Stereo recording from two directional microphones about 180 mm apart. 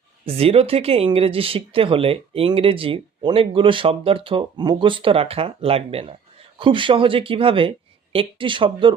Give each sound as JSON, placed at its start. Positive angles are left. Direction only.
{"t": 0.3, "sound": "speech", "side_deg": -35}